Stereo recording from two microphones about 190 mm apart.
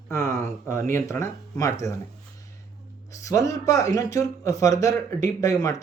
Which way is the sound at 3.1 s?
15° left (ahead or behind).